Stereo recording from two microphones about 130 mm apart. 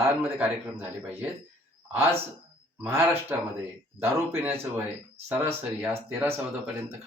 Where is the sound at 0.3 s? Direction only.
15° right (ahead or behind).